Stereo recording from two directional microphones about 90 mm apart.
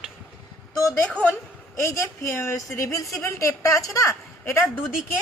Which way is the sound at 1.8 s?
35° left (ahead or behind).